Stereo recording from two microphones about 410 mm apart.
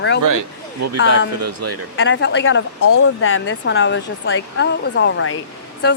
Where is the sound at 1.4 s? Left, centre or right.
Right.